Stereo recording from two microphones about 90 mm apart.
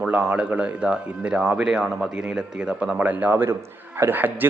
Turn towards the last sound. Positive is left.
turn(degrees=-20)  # may be behind; listen again after turning